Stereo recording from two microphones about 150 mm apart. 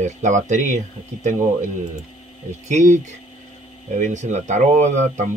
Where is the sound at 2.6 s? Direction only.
55° right (ahead or behind).